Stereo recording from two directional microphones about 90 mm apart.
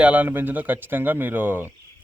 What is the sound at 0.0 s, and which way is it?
Speech, 15° right (ahead or behind).